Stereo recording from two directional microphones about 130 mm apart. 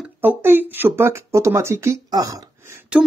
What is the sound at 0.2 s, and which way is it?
Speech, 15° right (ahead or behind).